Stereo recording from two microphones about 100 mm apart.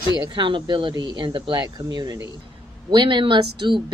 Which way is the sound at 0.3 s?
55° right (ahead or behind).